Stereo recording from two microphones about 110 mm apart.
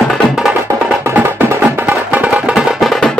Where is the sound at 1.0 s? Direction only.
25° right (ahead or behind).